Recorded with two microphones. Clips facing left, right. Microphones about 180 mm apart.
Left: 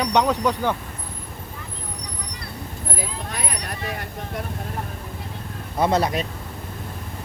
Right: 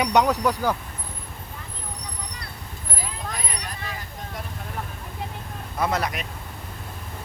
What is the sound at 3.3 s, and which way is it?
Vehicle, 70° left (ahead or behind).